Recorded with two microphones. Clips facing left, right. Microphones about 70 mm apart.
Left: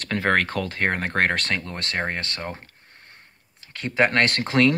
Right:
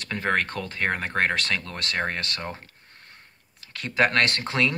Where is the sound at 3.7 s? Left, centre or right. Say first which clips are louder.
Left 1 dB; left.